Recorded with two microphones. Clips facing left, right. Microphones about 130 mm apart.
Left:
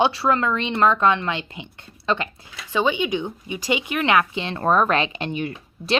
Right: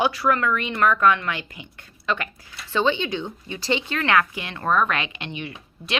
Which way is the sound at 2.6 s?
10° left (ahead or behind).